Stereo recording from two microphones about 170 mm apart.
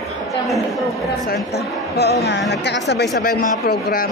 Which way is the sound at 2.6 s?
85° left.